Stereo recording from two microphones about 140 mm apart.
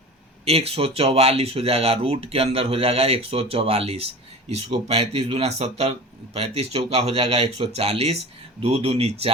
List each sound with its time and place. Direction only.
0.4 s speech: 45° right (ahead or behind)